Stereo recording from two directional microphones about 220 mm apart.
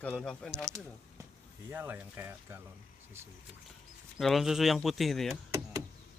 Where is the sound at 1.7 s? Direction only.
10° right (ahead or behind).